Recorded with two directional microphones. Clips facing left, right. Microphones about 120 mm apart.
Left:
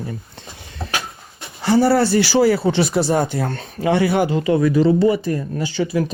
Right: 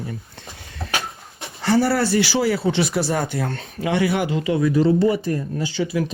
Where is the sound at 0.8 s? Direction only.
25° left (ahead or behind).